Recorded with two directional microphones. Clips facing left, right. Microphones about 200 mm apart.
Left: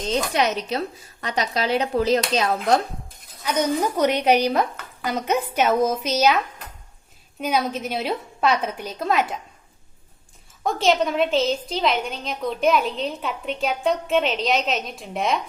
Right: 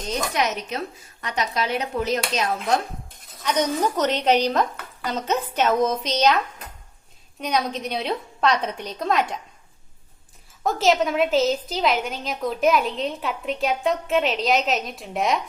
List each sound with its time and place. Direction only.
0.1 s speech: 30° left (ahead or behind)
3.4 s a woman's voice: 10° left (ahead or behind)
10.6 s a woman's voice: centre (ahead or behind)